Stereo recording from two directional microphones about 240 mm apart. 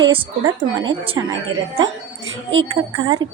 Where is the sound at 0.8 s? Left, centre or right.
Centre.